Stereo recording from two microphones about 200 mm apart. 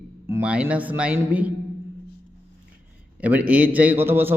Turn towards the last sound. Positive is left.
turn(degrees=-10)  # may be behind; listen again after turning